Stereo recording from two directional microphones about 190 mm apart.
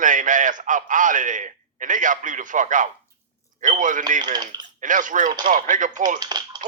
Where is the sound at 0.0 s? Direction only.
40° right (ahead or behind).